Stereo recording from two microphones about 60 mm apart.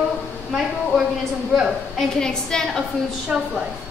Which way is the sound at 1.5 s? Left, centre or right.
Centre.